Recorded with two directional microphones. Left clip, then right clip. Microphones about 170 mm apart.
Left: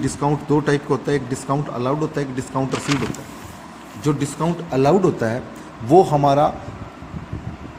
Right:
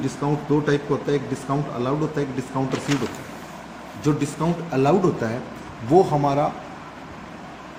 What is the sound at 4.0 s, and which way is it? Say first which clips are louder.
Speech: left 2 dB; 40° left (ahead or behind).